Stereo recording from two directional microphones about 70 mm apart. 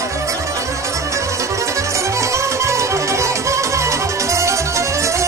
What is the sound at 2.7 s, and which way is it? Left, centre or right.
Music, right.